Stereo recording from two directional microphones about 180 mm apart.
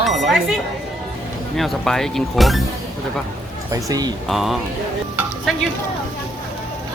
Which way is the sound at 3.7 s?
20° right (ahead or behind).